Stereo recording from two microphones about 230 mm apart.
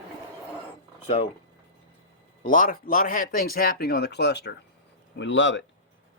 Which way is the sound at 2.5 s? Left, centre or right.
Left.